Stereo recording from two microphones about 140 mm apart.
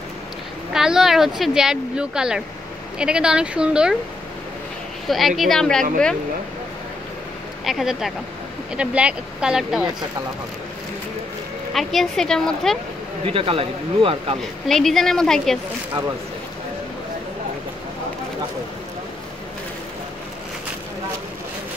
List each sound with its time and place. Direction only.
0.7 s speech: 5° right (ahead or behind)
5.0 s speech: centre (ahead or behind)
7.6 s speech: centre (ahead or behind)
11.7 s speech: centre (ahead or behind)
13.2 s speech: 40° right (ahead or behind)
14.7 s speech: centre (ahead or behind)